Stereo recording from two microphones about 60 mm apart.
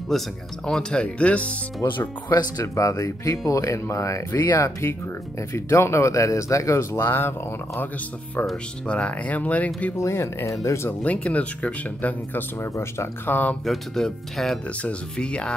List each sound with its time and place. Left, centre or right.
0.1 s speech: centre; by 1.6 s left
1.8 s speech: left
2.3 s speech: left
2.7 s speech: left
5.5 s speech: left
6.9 s speech: left
8.8 s speech: left
9.9 s speech: left
11.0 s speech: left
12.7 s speech: left
13.3 s speech: left
13.7 s speech: centre
14.8 s speech: centre